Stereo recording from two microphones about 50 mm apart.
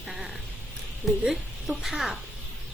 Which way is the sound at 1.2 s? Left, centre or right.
Centre.